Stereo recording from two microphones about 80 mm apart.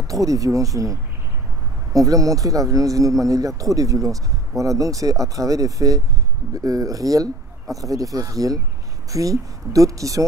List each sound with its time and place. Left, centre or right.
0.0 s a man's voice: right